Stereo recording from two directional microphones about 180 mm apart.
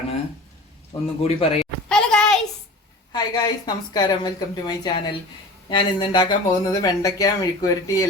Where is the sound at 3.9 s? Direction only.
20° left (ahead or behind).